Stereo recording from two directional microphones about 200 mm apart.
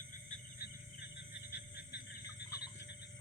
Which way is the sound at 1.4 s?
55° left (ahead or behind).